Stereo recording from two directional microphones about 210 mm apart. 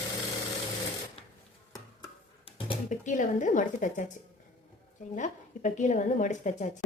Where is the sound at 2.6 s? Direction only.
35° left (ahead or behind).